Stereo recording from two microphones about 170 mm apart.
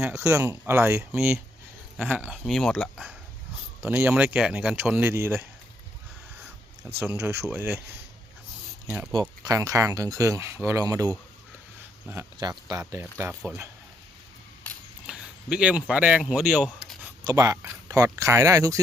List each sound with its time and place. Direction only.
0.1 s speech: 15° right (ahead or behind)
2.4 s speech: 5° left (ahead or behind); by 5.5 s 15° right (ahead or behind)
7.0 s speech: 15° right (ahead or behind)
9.4 s speech: 20° right (ahead or behind)
15.0 s speech: 5° right (ahead or behind)
16.6 s a sound: centre (ahead or behind)
17.2 s speech: 20° right (ahead or behind)